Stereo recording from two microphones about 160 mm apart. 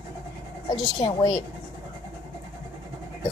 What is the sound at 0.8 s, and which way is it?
Speech, 25° left (ahead or behind).